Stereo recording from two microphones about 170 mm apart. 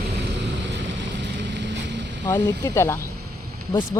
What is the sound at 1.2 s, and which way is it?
Boat, 90° right.